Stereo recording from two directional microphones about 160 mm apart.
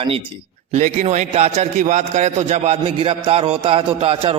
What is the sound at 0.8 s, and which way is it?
A man's voice, 45° right (ahead or behind).